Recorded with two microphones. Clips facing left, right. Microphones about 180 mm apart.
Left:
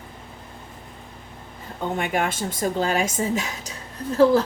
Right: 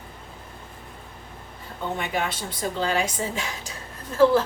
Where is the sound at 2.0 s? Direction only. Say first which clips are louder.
Left 5 dB; 50° left (ahead or behind).